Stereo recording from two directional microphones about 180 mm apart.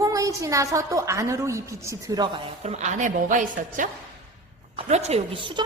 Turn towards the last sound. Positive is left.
turn(degrees=-30)  # may be behind; listen again after turning